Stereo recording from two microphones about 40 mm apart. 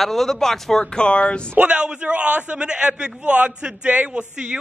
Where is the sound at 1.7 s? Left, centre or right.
Right.